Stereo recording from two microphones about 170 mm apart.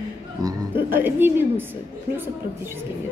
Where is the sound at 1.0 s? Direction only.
10° right (ahead or behind).